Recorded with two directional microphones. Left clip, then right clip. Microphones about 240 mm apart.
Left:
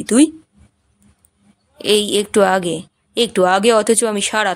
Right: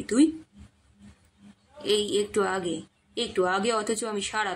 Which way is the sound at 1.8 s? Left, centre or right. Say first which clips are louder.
Left 9 dB; left.